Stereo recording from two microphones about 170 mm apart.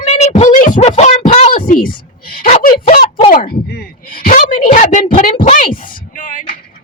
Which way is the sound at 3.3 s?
60° left (ahead or behind).